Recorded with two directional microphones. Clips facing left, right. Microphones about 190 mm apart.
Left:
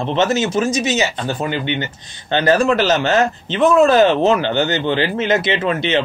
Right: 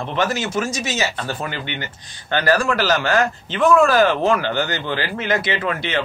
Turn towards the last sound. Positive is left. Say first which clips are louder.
# left 5 dB
turn(degrees=20)  # may be behind; listen again after turning